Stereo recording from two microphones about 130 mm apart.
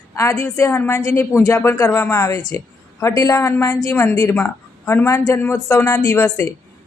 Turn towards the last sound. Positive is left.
turn(degrees=25)  # may be behind; listen again after turning